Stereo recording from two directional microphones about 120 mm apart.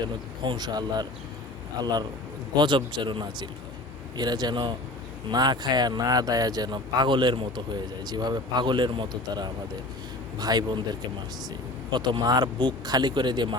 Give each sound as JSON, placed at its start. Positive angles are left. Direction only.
{"t": 0.0, "sound": "speech", "side_deg": -35}
{"t": 11.9, "sound": "speech", "side_deg": -40}